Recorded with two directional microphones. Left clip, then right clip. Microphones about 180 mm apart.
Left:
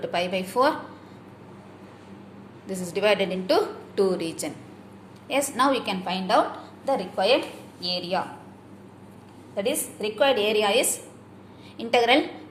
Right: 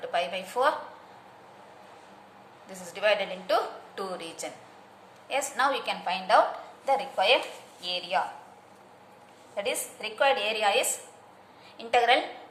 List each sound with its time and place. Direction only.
0.0 s a woman's voice: 20° left (ahead or behind)
2.6 s a woman's voice: 20° left (ahead or behind)
9.6 s a woman's voice: 15° left (ahead or behind)